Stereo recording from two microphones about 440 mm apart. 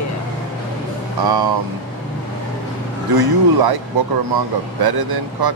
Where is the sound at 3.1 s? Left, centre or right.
Right.